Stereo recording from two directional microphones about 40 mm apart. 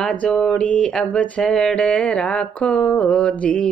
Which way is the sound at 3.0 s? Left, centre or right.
Left.